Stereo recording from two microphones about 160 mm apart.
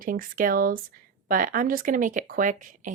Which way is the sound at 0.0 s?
60° right (ahead or behind).